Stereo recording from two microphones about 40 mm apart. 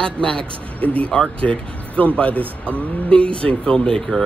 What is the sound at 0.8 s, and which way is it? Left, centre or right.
Speech, left.